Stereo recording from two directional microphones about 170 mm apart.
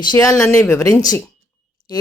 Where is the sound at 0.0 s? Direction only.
20° left (ahead or behind).